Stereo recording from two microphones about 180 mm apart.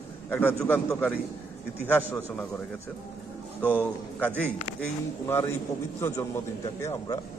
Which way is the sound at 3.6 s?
10° left (ahead or behind).